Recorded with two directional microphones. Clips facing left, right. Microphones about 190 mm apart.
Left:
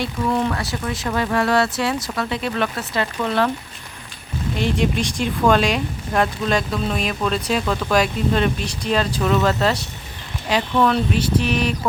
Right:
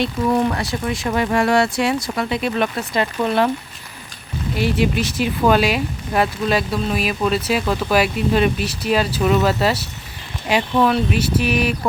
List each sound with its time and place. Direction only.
0.0 s speech: 20° right (ahead or behind)
4.5 s speech: 5° right (ahead or behind)